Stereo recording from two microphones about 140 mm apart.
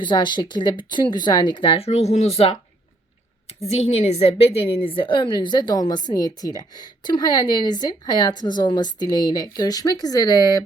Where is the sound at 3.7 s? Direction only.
45° left (ahead or behind).